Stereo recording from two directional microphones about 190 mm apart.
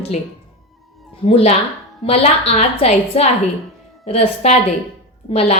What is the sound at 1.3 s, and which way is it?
A woman's voice, 30° left (ahead or behind).